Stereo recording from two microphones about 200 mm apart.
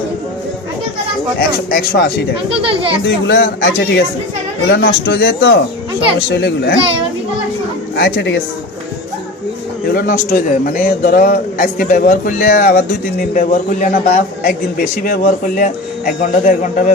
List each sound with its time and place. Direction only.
1.7 s a man's voice: 50° left (ahead or behind)
2.6 s speech: 25° right (ahead or behind)
3.2 s speech: 60° left (ahead or behind)
7.9 s speech: 55° left (ahead or behind)
9.8 s a man's voice: 50° left (ahead or behind)